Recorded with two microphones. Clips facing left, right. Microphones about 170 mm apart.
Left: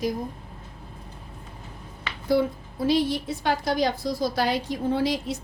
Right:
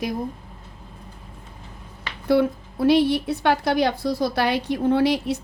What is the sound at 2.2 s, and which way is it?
A woman's voice, 65° right (ahead or behind).